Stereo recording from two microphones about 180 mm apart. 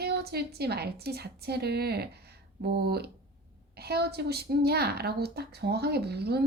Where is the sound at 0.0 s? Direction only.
65° right (ahead or behind).